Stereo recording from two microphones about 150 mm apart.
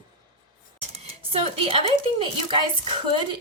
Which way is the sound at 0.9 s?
40° right (ahead or behind).